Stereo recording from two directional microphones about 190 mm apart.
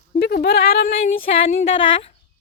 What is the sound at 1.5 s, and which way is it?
Speech, 30° left (ahead or behind).